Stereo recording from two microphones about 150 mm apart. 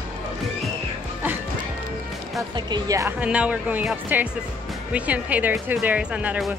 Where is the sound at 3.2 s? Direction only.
10° right (ahead or behind).